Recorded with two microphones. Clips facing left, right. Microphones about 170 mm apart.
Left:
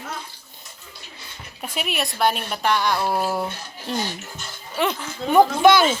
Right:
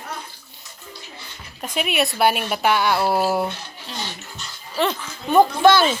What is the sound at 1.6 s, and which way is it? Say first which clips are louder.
A woman's voice: right 5 dB; centre (ahead or behind).